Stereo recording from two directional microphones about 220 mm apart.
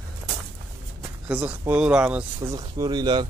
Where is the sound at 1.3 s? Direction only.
5° right (ahead or behind).